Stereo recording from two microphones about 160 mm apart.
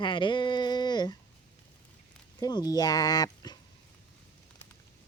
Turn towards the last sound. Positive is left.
turn(degrees=25)  # may be behind; listen again after turning